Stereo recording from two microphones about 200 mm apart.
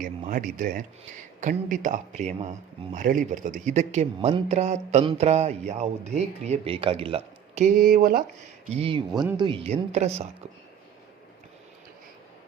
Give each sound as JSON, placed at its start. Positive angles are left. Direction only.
{"t": 0.0, "sound": "speech", "side_deg": -40}
{"t": 8.7, "sound": "speech", "side_deg": -25}